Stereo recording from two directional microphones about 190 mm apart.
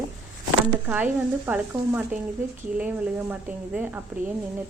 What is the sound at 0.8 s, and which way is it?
Speech, 10° right (ahead or behind).